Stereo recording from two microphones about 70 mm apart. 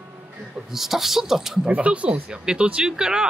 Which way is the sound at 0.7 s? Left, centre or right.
Centre.